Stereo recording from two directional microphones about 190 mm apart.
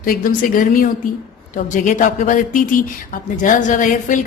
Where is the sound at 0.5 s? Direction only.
45° left (ahead or behind).